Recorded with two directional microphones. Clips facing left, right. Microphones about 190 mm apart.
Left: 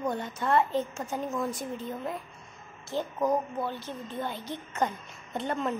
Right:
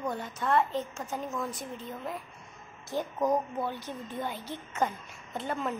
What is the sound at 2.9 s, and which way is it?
A woman's voice, 15° right (ahead or behind).